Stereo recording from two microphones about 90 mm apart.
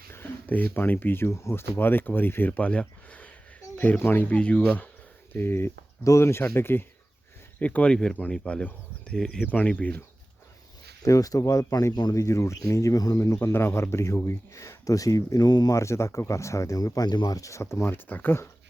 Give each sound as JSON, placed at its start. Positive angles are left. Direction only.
{"t": 0.1, "sound": "speech", "side_deg": 20}
{"t": 7.6, "sound": "speech", "side_deg": 15}
{"t": 11.0, "sound": "speech", "side_deg": 40}
{"t": 11.9, "sound": "speech", "side_deg": 50}
{"t": 12.2, "sound": "speech", "side_deg": 35}
{"t": 15.8, "sound": "speech", "side_deg": 30}